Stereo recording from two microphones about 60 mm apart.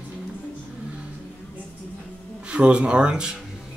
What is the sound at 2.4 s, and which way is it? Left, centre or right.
Speech, centre.